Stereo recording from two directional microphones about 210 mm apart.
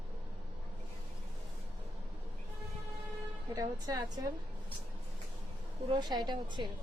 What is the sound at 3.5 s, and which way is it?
Speech, 15° right (ahead or behind).